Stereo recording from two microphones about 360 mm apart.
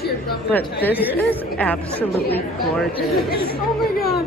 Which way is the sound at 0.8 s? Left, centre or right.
Centre.